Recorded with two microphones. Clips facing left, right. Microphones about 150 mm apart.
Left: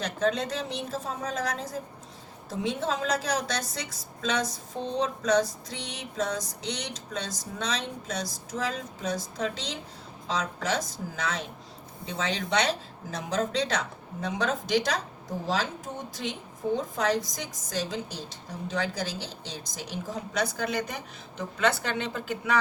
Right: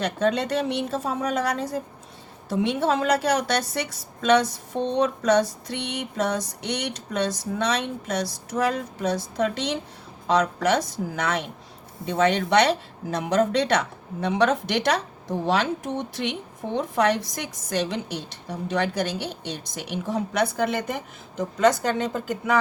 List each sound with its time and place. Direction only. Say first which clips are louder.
0.0 s a woman's voice: right 4 dB; 65° right (ahead or behind); by 22.4 s 45° right (ahead or behind)